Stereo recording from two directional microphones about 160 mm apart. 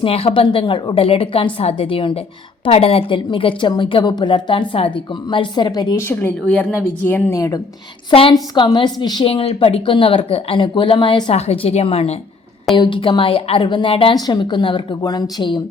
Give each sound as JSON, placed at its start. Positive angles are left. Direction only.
{"t": 0.0, "sound": "a woman's voice", "side_deg": 35}
{"t": 8.1, "sound": "a woman's voice", "side_deg": 30}